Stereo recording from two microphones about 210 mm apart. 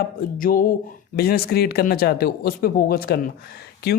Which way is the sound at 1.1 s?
45° left (ahead or behind).